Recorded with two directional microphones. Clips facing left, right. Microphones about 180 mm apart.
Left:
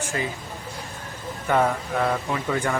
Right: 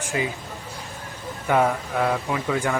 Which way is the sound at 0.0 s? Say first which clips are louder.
Right 2 dB; 15° right (ahead or behind).